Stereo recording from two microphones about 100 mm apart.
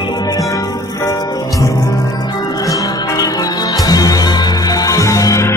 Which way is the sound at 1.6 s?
35° left (ahead or behind).